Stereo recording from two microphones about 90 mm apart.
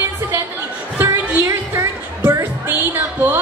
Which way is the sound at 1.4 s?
25° right (ahead or behind).